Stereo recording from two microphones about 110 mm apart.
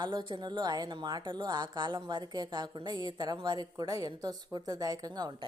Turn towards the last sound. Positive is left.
turn(degrees=-40)  # may be behind; listen again after turning